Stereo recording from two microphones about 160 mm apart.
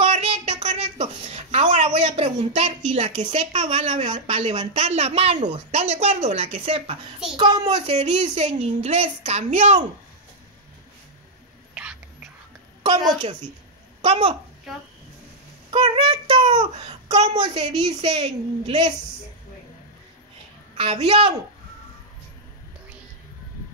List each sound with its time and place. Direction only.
0.0 s a sound: 40° right (ahead or behind)
2.9 s a woman's voice: 50° right (ahead or behind)
3.5 s a woman's voice: 30° right (ahead or behind)
4.1 s a woman's voice: 40° right (ahead or behind)
7.8 s a woman's voice: 45° right (ahead or behind)
11.7 s whispering: 5° right (ahead or behind)
12.8 s a woman's voice: 30° right (ahead or behind)
14.0 s a woman's voice: 40° right (ahead or behind)
15.7 s child singing: 35° right (ahead or behind)
17.2 s a woman's voice: 40° right (ahead or behind)
20.7 s a woman's voice: 40° right (ahead or behind)